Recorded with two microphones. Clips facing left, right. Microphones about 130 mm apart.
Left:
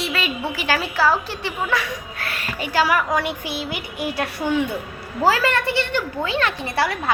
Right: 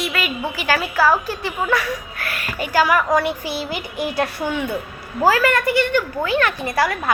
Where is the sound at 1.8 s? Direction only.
30° left (ahead or behind).